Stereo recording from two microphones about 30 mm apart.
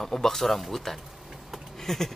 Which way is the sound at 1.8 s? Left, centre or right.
Centre.